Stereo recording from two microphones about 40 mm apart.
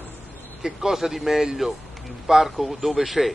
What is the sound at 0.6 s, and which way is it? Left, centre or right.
Speech, centre.